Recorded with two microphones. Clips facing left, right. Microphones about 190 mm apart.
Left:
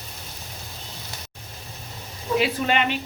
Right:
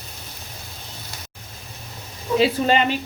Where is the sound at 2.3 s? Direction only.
30° right (ahead or behind).